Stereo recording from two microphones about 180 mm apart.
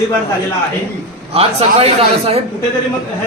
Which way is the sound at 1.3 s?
35° right (ahead or behind).